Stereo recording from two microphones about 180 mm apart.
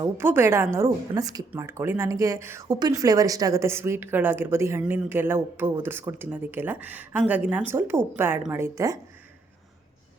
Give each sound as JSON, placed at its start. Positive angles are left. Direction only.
{"t": 0.0, "sound": "speech", "side_deg": -15}